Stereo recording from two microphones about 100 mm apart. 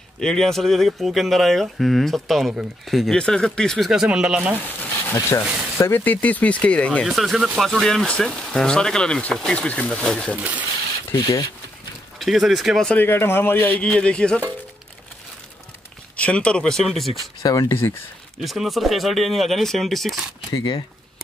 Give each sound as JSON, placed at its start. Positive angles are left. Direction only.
{"t": 0.2, "sound": "speech", "side_deg": 5}
{"t": 5.1, "sound": "speech", "side_deg": 30}
{"t": 7.1, "sound": "speech", "side_deg": 0}
{"t": 10.3, "sound": "speech", "side_deg": -15}
{"t": 12.2, "sound": "speech", "side_deg": 0}
{"t": 12.9, "sound": "speech", "side_deg": 20}
{"t": 16.2, "sound": "speech", "side_deg": 10}
{"t": 17.4, "sound": "speech", "side_deg": 35}
{"t": 18.4, "sound": "speech", "side_deg": 0}
{"t": 20.5, "sound": "speech", "side_deg": 50}